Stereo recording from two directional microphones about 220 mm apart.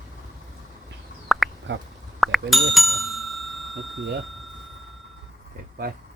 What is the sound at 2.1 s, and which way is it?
Bicycle bell, centre (ahead or behind).